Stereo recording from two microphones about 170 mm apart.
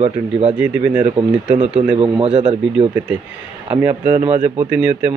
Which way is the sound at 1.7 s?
30° right (ahead or behind).